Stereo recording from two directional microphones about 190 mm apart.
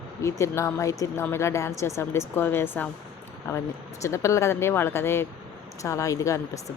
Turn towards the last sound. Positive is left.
turn(degrees=15)  # may be behind; listen again after turning